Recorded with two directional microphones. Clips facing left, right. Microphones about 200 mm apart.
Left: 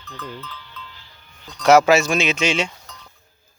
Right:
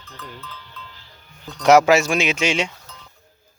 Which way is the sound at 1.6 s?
15° right (ahead or behind).